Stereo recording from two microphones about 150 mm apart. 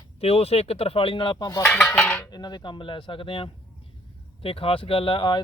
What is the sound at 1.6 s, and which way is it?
Cutlery, 15° left (ahead or behind).